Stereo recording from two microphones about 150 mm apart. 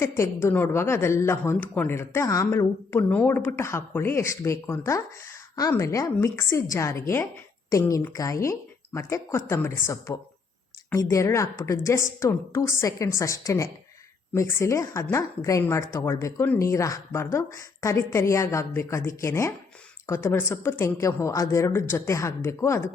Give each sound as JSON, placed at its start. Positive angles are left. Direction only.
{"t": 0.0, "sound": "speech", "side_deg": 15}